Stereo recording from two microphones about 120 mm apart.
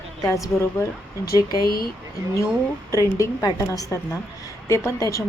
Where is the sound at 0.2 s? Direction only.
25° left (ahead or behind).